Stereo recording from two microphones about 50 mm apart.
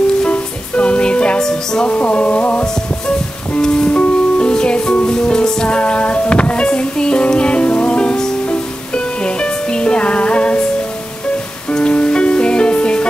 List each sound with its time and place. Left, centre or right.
0.3 s music: left
1.9 s music: left
3.9 s music: left
11.7 s music: left